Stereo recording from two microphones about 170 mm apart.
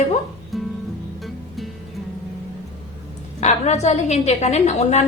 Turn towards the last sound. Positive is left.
turn(degrees=40)  # may be behind; listen again after turning